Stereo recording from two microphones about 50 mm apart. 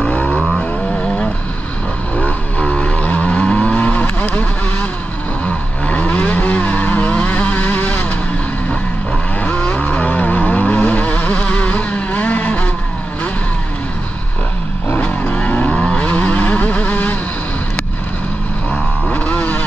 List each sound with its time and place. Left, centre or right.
0.0 s vehicle: left
2.1 s vehicle: left
5.4 s vehicle: left
9.4 s vehicle: left
15.3 s vehicle: left
18.7 s vehicle: left